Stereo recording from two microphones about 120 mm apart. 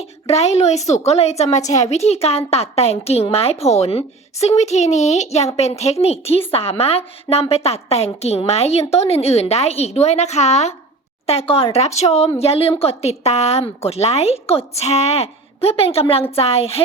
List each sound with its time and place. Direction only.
0.0 s a woman's voice: 60° left (ahead or behind)
11.3 s a woman's voice: 55° left (ahead or behind)